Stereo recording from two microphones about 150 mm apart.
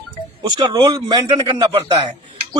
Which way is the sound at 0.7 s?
25° right (ahead or behind).